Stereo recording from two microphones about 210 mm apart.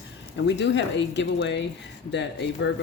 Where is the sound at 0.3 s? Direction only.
55° left (ahead or behind).